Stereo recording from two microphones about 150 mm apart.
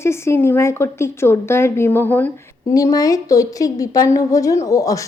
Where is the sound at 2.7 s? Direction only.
25° left (ahead or behind).